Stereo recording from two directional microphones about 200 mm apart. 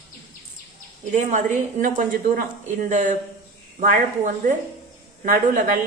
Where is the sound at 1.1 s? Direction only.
40° right (ahead or behind).